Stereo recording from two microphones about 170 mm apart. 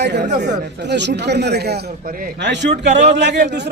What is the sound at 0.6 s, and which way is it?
A man's voice, 90° right.